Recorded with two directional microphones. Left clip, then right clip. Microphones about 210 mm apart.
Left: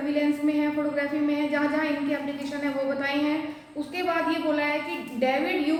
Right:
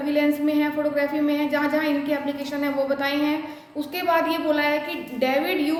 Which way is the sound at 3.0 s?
55° right (ahead or behind).